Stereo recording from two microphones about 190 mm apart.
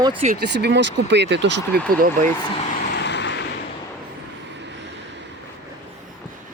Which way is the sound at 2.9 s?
65° left (ahead or behind).